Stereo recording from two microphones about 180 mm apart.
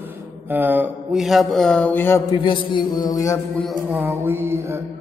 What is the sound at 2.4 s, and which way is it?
Music, 25° left (ahead or behind).